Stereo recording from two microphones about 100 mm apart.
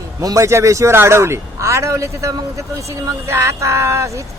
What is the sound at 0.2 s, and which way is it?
Speech, 35° right (ahead or behind).